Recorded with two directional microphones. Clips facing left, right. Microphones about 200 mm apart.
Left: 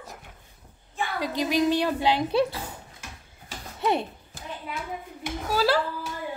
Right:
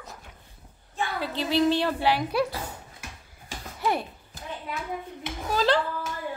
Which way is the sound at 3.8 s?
25° left (ahead or behind).